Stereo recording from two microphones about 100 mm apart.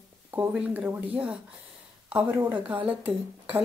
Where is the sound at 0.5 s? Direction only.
10° right (ahead or behind).